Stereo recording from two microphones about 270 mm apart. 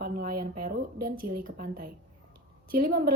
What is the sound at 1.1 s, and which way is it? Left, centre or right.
Speech, right.